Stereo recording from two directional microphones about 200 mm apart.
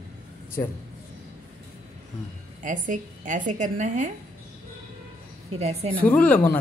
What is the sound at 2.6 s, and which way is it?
A woman's voice, 40° right (ahead or behind).